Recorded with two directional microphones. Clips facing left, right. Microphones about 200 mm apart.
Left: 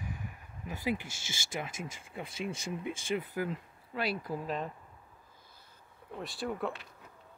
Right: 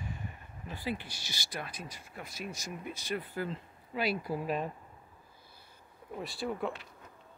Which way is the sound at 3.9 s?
Centre (ahead or behind).